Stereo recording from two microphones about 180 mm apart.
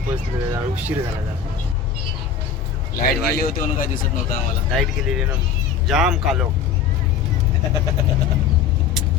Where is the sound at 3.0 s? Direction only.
55° left (ahead or behind).